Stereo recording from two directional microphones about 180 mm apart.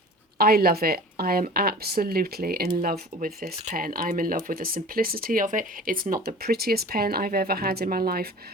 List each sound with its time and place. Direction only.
0.3 s speech: 60° right (ahead or behind)